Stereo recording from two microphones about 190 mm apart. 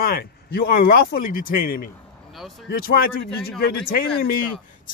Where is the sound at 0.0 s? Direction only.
55° left (ahead or behind).